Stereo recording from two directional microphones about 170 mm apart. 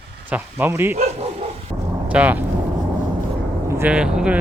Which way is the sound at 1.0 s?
35° right (ahead or behind).